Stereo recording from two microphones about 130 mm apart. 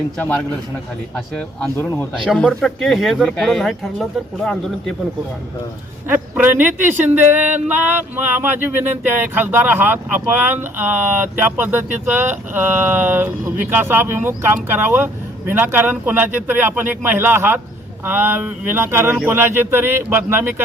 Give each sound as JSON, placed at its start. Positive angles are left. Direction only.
{"t": 0.2, "sound": "a man's voice", "side_deg": 10}
{"t": 2.2, "sound": "speech", "side_deg": 5}
{"t": 6.1, "sound": "speech", "side_deg": -15}